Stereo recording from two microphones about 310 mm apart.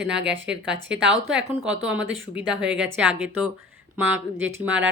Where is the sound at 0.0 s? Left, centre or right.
Right.